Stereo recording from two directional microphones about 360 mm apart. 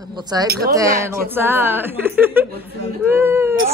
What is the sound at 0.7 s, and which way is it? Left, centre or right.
A woman's voice, centre.